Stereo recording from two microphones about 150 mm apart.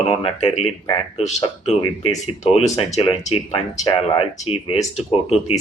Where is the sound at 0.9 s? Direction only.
40° left (ahead or behind).